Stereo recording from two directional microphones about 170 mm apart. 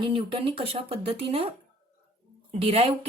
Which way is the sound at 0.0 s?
30° right (ahead or behind).